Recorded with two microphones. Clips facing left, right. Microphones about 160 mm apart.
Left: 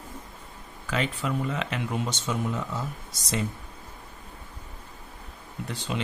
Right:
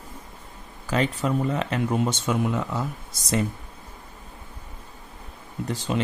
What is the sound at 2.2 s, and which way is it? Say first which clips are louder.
Speech: right 5 dB; 60° right (ahead or behind).